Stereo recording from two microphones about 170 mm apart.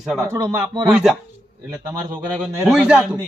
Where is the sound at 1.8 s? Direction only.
15° right (ahead or behind).